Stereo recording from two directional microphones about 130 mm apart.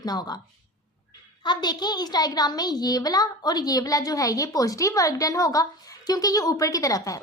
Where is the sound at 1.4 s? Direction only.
35° left (ahead or behind).